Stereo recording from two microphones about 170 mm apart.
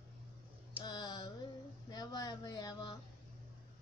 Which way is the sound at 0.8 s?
25° left (ahead or behind).